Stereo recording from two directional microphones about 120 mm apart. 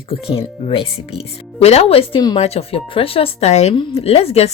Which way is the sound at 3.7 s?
50° left (ahead or behind).